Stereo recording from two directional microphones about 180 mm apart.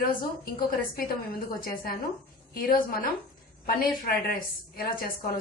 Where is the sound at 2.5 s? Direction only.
55° left (ahead or behind).